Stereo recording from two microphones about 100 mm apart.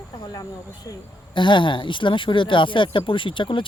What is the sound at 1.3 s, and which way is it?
Speech, 50° left (ahead or behind).